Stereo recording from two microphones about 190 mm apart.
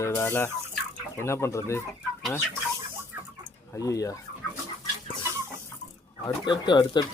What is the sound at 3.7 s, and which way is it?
Speech, 20° left (ahead or behind).